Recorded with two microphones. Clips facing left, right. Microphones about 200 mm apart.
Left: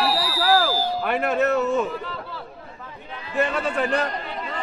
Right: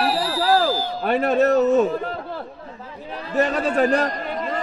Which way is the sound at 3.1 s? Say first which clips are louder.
Right 3 dB; 40° right (ahead or behind).